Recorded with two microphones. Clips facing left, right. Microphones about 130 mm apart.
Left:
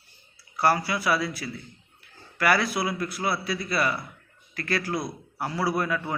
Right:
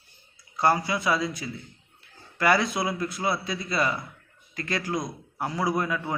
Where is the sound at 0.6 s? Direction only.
20° right (ahead or behind).